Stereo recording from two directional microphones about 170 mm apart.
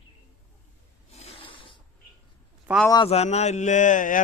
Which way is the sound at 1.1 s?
35° left (ahead or behind).